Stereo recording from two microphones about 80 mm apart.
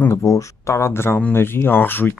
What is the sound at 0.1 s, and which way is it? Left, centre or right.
Speech, left.